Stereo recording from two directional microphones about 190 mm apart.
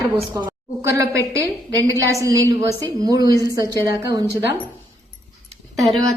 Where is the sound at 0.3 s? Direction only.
15° right (ahead or behind).